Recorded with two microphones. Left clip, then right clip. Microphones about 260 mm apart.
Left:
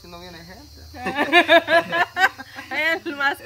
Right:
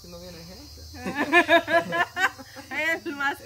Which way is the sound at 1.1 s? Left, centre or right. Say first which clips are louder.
Left 4 dB; centre.